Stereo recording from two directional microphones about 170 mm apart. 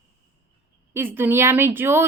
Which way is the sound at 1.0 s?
10° right (ahead or behind).